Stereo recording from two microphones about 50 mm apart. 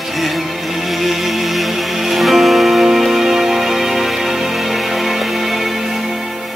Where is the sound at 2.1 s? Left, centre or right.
Centre.